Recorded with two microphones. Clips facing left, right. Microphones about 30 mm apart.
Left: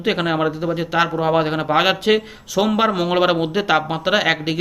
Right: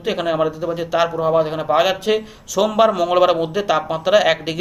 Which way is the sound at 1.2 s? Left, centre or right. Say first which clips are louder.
Right 2 dB; left.